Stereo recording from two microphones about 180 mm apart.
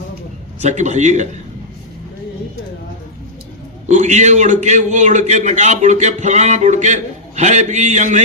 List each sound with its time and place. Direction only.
0.6 s a man's voice: 40° right (ahead or behind)
3.8 s a man's voice: 40° right (ahead or behind)